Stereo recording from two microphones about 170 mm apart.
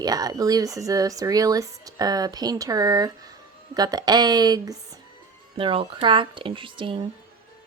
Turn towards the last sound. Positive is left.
turn(degrees=-30)  # may be behind; listen again after turning